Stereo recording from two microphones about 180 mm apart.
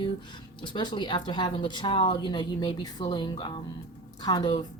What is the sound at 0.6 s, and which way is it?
Speech, 25° left (ahead or behind).